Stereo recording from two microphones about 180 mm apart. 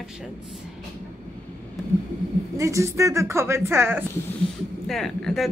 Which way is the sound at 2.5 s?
15° right (ahead or behind).